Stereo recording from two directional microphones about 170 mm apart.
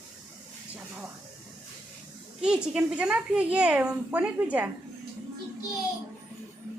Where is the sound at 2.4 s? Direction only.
5° right (ahead or behind).